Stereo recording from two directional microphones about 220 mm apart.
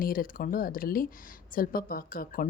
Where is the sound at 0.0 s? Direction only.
40° left (ahead or behind).